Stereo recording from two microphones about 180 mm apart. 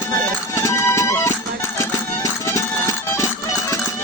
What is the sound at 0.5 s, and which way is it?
Music, 15° left (ahead or behind).